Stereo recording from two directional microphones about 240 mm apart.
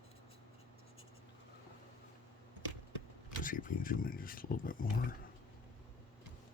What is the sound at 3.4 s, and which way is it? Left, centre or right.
Speech, left.